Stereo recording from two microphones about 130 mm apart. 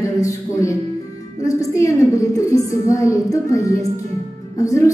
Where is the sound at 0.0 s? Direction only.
25° left (ahead or behind).